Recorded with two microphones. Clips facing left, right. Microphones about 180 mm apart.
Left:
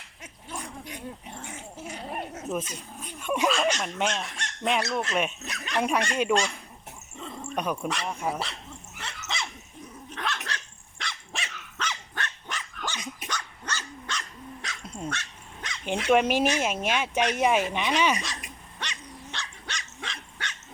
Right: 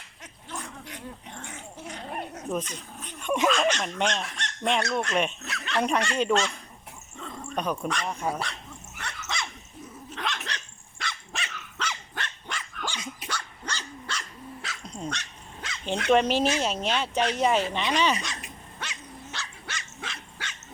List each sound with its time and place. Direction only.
0.2 s dog: 10° left (ahead or behind)
5.6 s speech: 10° left (ahead or behind)
9.0 s dog: centre (ahead or behind)
10.2 s dog: 15° right (ahead or behind)
11.0 s dog: centre (ahead or behind)
14.8 s dog: 5° left (ahead or behind)
15.1 s dog: 15° right (ahead or behind)
15.9 s speech: 5° left (ahead or behind)
19.3 s dog: 5° right (ahead or behind)